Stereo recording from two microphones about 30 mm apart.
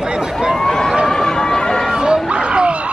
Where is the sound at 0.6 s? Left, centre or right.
Centre.